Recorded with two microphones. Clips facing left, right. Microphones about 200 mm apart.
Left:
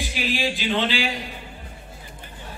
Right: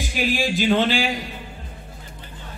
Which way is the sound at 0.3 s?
45° right (ahead or behind).